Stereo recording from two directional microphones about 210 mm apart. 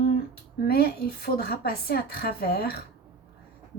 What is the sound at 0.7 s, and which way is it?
A woman's voice, 45° left (ahead or behind).